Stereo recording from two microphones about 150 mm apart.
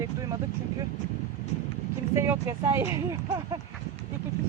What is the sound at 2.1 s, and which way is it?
Speech, 20° right (ahead or behind).